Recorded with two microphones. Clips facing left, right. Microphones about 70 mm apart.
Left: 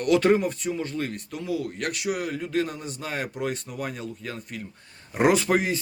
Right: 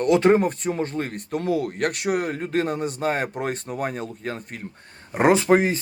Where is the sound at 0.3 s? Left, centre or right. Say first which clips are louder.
Right 4 dB; right.